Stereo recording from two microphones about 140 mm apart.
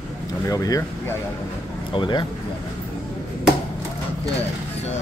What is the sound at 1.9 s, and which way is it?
Speech, 35° left (ahead or behind).